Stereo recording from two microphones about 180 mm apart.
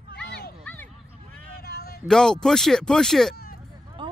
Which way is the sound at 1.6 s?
65° left (ahead or behind).